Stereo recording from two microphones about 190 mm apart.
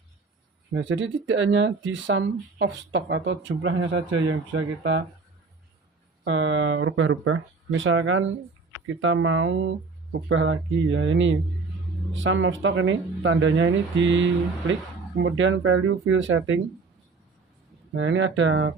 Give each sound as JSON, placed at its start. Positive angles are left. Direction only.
{"t": 0.7, "sound": "speech", "side_deg": -85}
{"t": 6.2, "sound": "speech", "side_deg": -85}
{"t": 17.9, "sound": "speech", "side_deg": -75}